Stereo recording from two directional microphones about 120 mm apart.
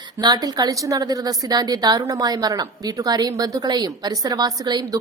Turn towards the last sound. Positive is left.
turn(degrees=-35)  # may be behind; listen again after turning